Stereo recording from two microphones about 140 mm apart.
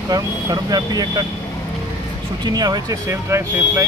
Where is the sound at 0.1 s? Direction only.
25° right (ahead or behind).